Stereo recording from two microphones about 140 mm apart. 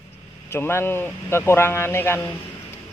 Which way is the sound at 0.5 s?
15° left (ahead or behind).